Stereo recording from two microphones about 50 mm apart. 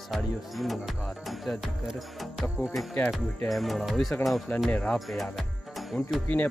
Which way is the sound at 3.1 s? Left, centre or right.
Centre.